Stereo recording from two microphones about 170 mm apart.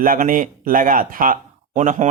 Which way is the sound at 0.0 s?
55° right (ahead or behind).